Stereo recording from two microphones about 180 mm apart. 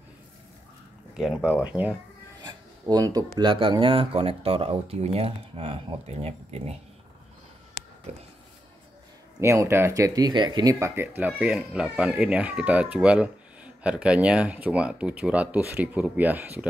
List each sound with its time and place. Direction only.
1.1 s speech: centre (ahead or behind)
2.4 s speech: 20° right (ahead or behind)
9.4 s speech: 15° right (ahead or behind)